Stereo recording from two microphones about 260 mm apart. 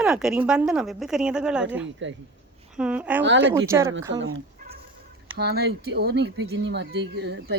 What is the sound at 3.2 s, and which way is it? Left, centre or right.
Speech, right.